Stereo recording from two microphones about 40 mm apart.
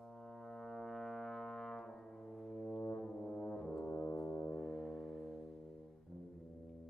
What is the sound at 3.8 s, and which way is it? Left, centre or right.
Brass instrument, left.